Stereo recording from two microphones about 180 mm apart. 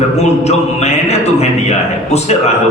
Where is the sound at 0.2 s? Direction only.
35° left (ahead or behind).